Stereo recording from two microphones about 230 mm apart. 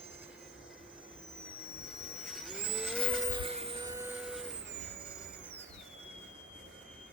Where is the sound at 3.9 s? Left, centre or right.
Centre.